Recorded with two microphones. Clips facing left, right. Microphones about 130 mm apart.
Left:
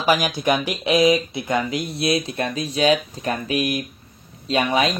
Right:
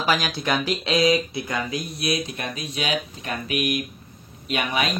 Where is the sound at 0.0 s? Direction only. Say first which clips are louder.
Left 4 dB; 15° left (ahead or behind).